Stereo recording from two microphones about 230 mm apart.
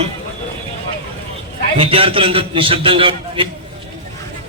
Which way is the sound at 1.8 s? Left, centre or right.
Right.